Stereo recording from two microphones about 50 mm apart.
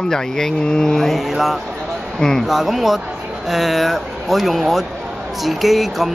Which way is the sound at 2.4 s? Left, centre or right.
Centre.